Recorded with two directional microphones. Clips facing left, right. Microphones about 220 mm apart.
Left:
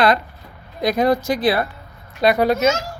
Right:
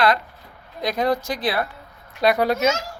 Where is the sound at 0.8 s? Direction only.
5° left (ahead or behind).